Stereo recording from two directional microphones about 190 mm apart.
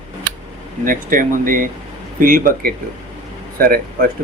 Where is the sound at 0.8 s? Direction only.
45° right (ahead or behind).